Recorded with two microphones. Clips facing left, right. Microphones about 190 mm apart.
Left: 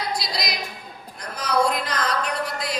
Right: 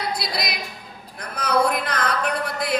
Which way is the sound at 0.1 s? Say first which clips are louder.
Right 1 dB; 55° right (ahead or behind).